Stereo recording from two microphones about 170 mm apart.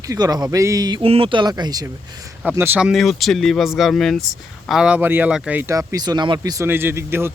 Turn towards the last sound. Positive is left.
turn(degrees=-15)  # may be behind; listen again after turning